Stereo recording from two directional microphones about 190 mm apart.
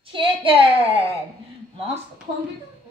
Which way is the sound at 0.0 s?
25° right (ahead or behind).